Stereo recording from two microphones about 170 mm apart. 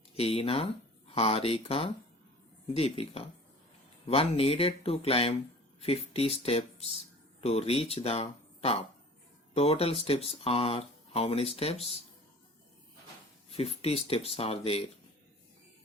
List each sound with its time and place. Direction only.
0.2 s speech: 35° left (ahead or behind)
13.6 s speech: 35° left (ahead or behind)